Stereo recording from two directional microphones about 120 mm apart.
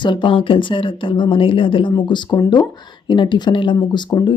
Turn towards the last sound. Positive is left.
turn(degrees=40)  # may be behind; listen again after turning